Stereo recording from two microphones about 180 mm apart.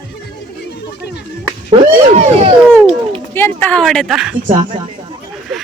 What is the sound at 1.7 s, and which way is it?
Speech, 35° right (ahead or behind).